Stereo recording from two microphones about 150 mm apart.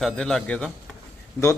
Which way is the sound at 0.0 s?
5° left (ahead or behind).